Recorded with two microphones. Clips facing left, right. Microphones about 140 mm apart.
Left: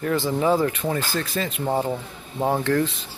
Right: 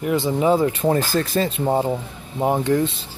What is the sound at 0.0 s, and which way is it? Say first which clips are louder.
Speech: right 3 dB; 20° right (ahead or behind).